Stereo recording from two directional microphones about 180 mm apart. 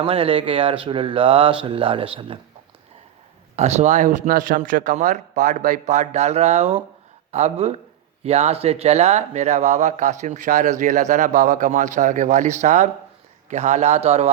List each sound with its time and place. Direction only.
0.0 s speech: 30° right (ahead or behind)
3.5 s speech: 40° right (ahead or behind)